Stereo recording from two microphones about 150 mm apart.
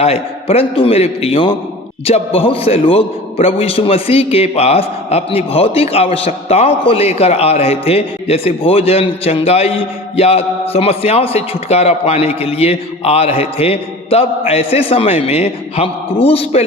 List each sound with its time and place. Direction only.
0.0 s a man's voice: 40° left (ahead or behind)